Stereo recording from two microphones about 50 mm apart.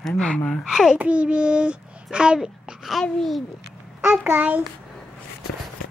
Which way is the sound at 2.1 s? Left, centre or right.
Centre.